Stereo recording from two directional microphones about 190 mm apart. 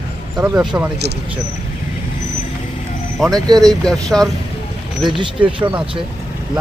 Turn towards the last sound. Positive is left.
turn(degrees=-25)  # may be behind; listen again after turning